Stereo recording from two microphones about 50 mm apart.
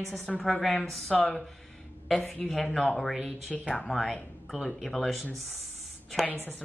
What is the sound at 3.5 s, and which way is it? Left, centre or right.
Speech, left.